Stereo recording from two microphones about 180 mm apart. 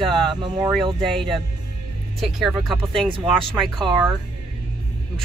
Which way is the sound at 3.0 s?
25° right (ahead or behind).